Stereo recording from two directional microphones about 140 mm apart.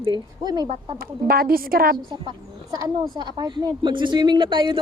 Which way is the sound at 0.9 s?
90° right.